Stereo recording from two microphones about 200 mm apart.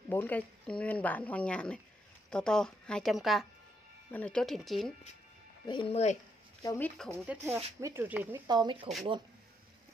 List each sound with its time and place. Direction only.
0.1 s a woman's voice: 10° left (ahead or behind)
5.7 s speech: 25° left (ahead or behind)
6.6 s speech: 15° left (ahead or behind)
7.1 s speech: 10° right (ahead or behind)
8.5 s speech: 20° right (ahead or behind)